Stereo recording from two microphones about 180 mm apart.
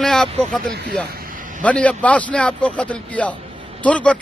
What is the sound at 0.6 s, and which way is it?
Speech, 65° right (ahead or behind).